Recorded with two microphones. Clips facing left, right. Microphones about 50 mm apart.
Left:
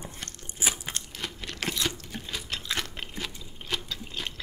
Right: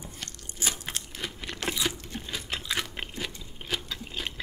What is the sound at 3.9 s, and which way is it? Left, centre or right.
Water, centre.